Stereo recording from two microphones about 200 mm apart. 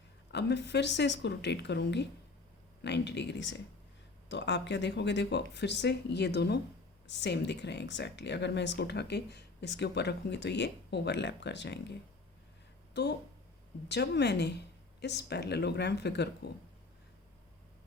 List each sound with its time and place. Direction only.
0.3 s speech: 60° left (ahead or behind)